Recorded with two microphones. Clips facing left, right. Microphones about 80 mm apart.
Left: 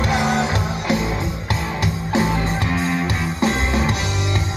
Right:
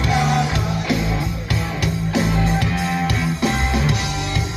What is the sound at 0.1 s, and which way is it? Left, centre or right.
Music, left.